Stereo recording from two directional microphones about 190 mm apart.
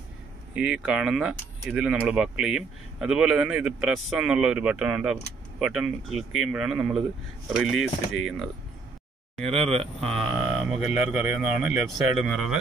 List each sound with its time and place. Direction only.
0.6 s speech: 5° right (ahead or behind)
9.4 s speech: 35° right (ahead or behind)
10.6 s speech: 5° right (ahead or behind)